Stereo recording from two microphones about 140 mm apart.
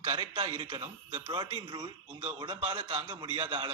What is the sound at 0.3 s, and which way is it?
A man's voice, 40° right (ahead or behind).